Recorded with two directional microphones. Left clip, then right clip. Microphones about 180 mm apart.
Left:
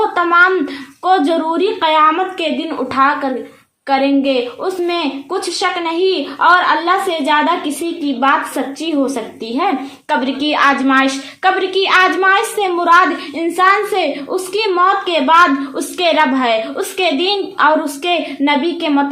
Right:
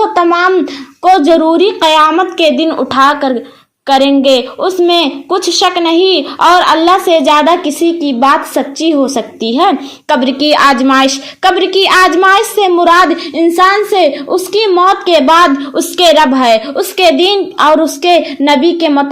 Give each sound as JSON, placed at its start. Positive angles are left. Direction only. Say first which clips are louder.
{"t": 0.1, "sound": "a woman's voice", "louder": "right 3 dB", "side_deg": -35}